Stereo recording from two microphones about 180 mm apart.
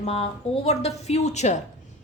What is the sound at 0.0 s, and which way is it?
A woman's voice, 35° left (ahead or behind).